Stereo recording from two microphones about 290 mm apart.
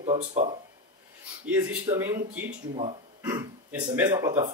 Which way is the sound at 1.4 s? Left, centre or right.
Centre.